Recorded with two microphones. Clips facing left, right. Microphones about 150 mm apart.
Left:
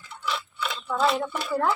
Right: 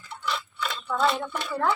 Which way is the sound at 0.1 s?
Centre (ahead or behind).